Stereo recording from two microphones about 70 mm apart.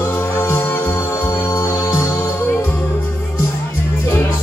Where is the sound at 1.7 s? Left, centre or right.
Left.